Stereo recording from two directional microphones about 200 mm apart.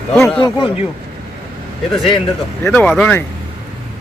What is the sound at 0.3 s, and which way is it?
Speech, 25° left (ahead or behind).